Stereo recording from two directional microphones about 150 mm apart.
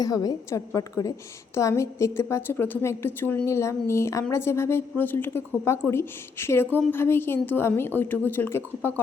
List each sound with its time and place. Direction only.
0.0 s a woman's voice: 25° left (ahead or behind)